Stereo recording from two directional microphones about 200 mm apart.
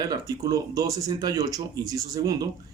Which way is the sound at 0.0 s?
20° right (ahead or behind).